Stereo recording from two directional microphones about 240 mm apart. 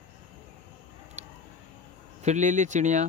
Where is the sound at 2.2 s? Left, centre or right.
Right.